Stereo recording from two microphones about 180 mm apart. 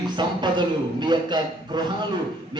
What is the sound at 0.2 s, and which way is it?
A man's voice, 25° right (ahead or behind).